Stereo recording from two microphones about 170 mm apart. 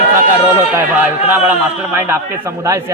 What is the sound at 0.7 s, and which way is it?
A man's voice, 10° right (ahead or behind).